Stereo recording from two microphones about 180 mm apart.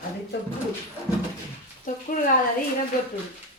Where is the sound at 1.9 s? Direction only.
45° left (ahead or behind).